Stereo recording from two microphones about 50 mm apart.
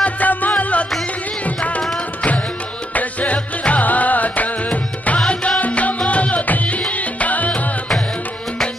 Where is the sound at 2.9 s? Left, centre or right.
Left.